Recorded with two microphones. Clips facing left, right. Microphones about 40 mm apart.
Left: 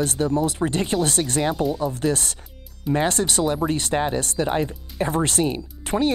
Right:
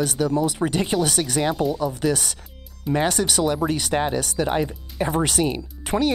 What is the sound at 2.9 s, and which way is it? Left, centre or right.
Speech, centre.